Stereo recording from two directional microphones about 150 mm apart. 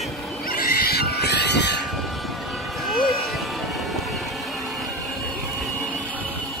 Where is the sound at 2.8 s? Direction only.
Centre (ahead or behind).